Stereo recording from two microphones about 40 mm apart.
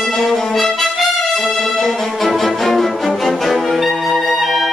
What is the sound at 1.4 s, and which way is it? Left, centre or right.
Music, centre.